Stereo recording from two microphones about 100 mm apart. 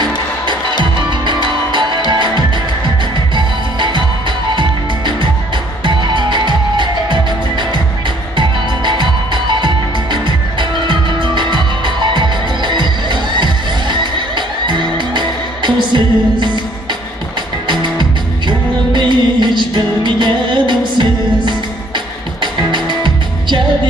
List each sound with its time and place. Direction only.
1.2 s music: 50° right (ahead or behind)
3.3 s music: 50° right (ahead or behind)
8.4 s music: 50° right (ahead or behind)
18.5 s music: 50° right (ahead or behind)